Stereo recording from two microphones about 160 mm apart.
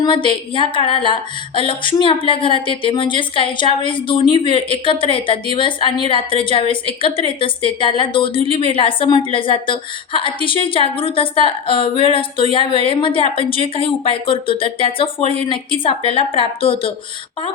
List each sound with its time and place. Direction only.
0.0 s a woman's voice: 30° left (ahead or behind)